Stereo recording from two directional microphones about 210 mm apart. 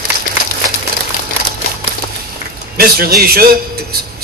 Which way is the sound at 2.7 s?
45° right (ahead or behind).